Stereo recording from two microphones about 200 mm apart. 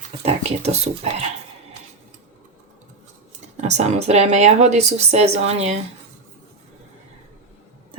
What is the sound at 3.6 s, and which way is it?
Speech, 35° right (ahead or behind).